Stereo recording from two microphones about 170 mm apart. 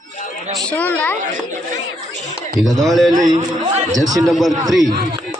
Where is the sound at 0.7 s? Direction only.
10° left (ahead or behind).